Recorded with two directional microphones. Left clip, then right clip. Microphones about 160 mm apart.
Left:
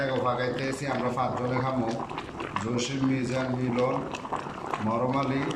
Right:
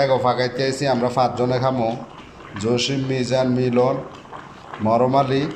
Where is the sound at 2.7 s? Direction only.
30° right (ahead or behind).